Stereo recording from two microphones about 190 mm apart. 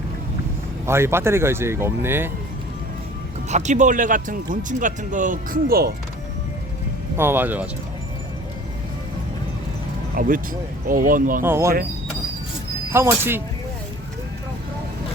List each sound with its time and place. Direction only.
0.9 s speech: 15° right (ahead or behind)
3.5 s speech: 40° right (ahead or behind)
7.2 s speech: 10° right (ahead or behind)
10.2 s speech: 45° right (ahead or behind)
11.4 s speech: 15° right (ahead or behind)
12.9 s speech: 10° right (ahead or behind)